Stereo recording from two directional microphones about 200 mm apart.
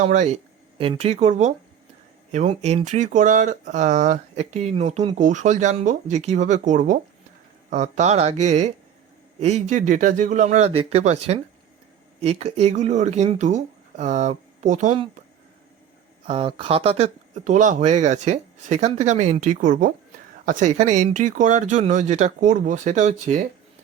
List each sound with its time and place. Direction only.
0.0 s speech: 35° right (ahead or behind)
16.2 s speech: 30° right (ahead or behind)